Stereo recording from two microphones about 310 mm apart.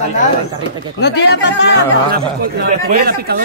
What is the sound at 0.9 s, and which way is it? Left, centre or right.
Speech, left.